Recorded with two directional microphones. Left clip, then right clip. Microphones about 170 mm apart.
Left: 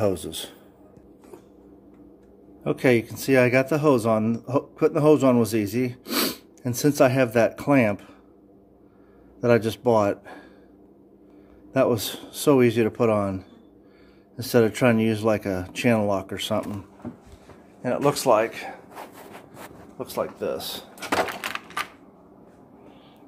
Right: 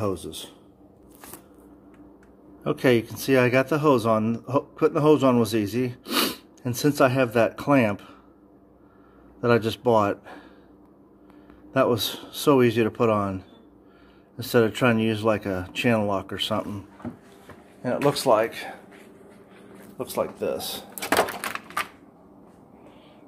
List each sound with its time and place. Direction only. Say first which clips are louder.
0.0 s speech: left 4 dB; 10° left (ahead or behind)
2.6 s speech: even; 10° left (ahead or behind)
9.4 s speech: left 1 dB; 15° left (ahead or behind)
11.7 s speech: even; 10° left (ahead or behind)
18.0 s speech: even; 10° left (ahead or behind)
20.0 s speech: right 1 dB; 5° right (ahead or behind)